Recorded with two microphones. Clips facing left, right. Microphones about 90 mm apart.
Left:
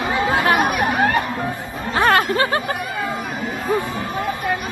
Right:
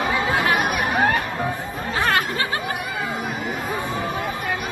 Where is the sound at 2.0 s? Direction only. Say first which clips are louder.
Left 6 dB; 45° left (ahead or behind).